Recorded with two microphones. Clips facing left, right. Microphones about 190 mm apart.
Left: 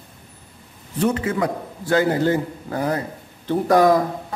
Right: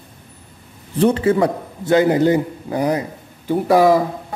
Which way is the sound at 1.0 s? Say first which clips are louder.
Right 6 dB; 30° right (ahead or behind).